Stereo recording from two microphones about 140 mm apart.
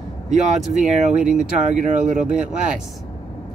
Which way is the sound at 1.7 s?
65° right (ahead or behind).